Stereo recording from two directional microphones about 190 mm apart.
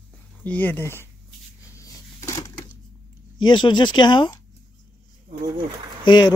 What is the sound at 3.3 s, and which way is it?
Speech, 25° left (ahead or behind).